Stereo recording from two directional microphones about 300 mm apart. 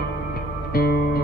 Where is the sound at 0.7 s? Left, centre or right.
Left.